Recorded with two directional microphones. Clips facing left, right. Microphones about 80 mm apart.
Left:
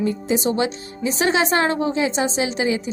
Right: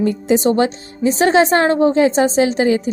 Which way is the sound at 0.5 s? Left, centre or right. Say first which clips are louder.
Right 6 dB; right.